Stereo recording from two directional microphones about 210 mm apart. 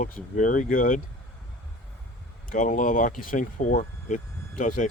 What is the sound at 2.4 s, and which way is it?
Speech, 40° left (ahead or behind).